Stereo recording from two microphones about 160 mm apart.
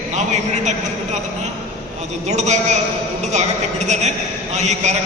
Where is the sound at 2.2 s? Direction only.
45° right (ahead or behind).